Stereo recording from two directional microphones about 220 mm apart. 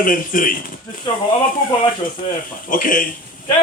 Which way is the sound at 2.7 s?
40° left (ahead or behind).